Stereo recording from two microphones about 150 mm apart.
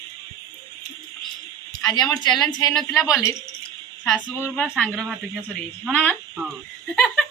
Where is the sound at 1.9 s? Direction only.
25° left (ahead or behind).